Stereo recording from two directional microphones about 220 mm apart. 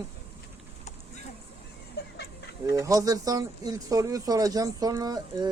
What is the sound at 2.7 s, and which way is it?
Speech, 15° right (ahead or behind).